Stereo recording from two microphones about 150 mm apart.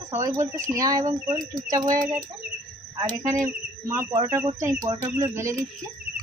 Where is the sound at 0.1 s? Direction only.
20° right (ahead or behind).